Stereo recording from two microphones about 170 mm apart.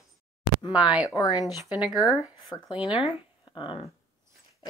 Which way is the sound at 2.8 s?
30° left (ahead or behind).